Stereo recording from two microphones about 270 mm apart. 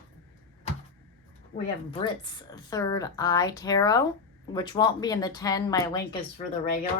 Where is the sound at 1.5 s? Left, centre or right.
Centre.